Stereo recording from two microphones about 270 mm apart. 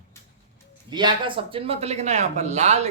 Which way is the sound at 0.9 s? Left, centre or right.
Centre.